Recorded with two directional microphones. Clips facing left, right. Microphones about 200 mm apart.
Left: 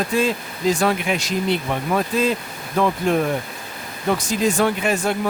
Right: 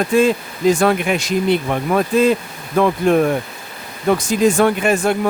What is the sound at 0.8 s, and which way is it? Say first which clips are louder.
Speech: right 4 dB; 55° right (ahead or behind).